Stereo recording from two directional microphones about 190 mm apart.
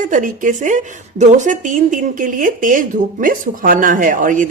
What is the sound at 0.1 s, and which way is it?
A woman's voice, 45° right (ahead or behind).